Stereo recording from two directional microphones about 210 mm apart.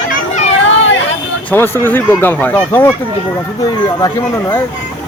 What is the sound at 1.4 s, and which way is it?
Speech, 10° left (ahead or behind).